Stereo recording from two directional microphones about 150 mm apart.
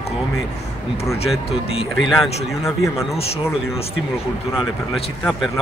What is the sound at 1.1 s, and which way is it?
Speech, 40° left (ahead or behind).